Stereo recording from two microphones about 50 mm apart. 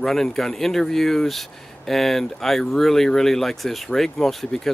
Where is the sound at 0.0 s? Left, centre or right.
Centre.